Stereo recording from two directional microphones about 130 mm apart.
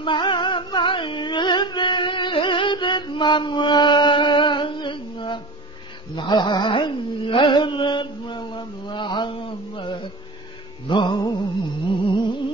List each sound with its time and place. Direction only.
0.0 s music: 40° left (ahead or behind)
6.1 s carnatic music: 35° left (ahead or behind)
10.9 s music: 35° left (ahead or behind)
11.9 s a sound: 40° left (ahead or behind)